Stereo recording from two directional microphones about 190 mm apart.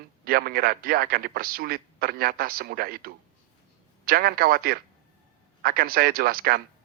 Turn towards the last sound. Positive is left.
turn(degrees=-50)  # may be behind; listen again after turning